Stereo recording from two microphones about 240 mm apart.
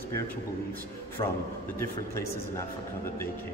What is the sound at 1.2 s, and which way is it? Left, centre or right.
Speech, left.